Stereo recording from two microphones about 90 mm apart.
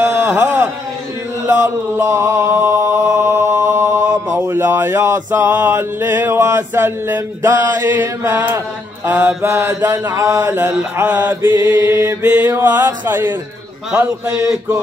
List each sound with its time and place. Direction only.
0.3 s a sound: 20° right (ahead or behind)
1.4 s mantra: 35° right (ahead or behind)
10.5 s mantra: 20° right (ahead or behind)